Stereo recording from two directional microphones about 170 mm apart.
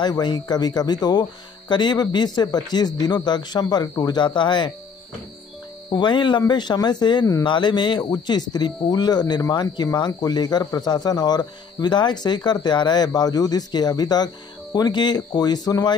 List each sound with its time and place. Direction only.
0.0 s speech: 25° left (ahead or behind)
5.9 s speech: 25° left (ahead or behind)